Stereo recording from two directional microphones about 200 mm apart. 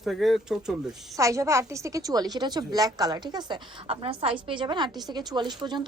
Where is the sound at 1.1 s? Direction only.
15° right (ahead or behind).